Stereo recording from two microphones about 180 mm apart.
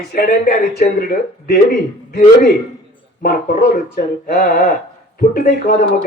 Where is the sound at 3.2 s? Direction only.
55° left (ahead or behind).